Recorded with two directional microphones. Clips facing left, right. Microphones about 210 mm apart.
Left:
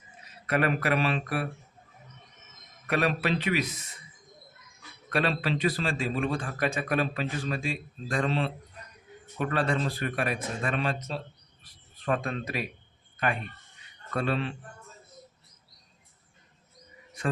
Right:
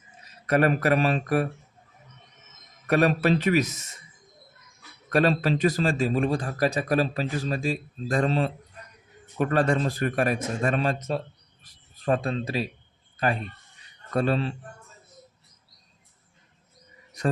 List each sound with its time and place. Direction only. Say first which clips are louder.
0.4 s a man's voice: right 5 dB; 40° right (ahead or behind)
2.8 s a man's voice: right 6 dB; 45° right (ahead or behind)
5.1 s a man's voice: right 6 dB; 40° right (ahead or behind)
17.2 s a sound: right 4 dB; 40° right (ahead or behind)